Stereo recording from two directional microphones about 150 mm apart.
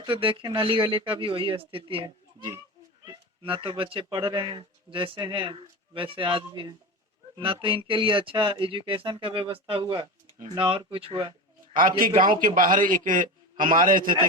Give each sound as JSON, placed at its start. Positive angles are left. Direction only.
{"t": 0.0, "sound": "speech", "side_deg": -35}
{"t": 11.7, "sound": "a man's voice", "side_deg": -70}